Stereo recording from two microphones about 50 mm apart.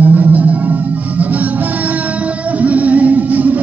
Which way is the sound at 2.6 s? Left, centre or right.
Right.